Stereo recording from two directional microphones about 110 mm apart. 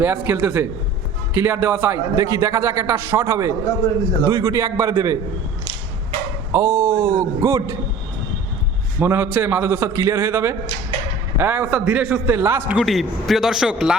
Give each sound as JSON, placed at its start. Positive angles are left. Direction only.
{"t": 0.0, "sound": "a man's voice", "side_deg": -15}
{"t": 6.5, "sound": "a man's voice", "side_deg": -30}
{"t": 9.0, "sound": "a man's voice", "side_deg": -20}
{"t": 12.8, "sound": "a man's voice", "side_deg": 0}